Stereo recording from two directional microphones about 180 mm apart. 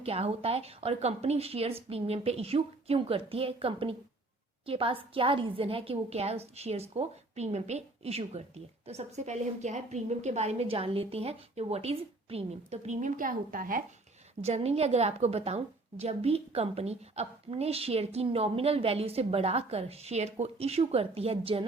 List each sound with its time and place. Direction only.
0.0 s a woman's voice: 35° right (ahead or behind); by 13.8 s 50° right (ahead or behind)
14.4 s a woman's voice: 35° right (ahead or behind)